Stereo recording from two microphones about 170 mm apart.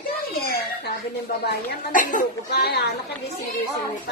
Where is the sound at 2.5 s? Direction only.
70° left (ahead or behind).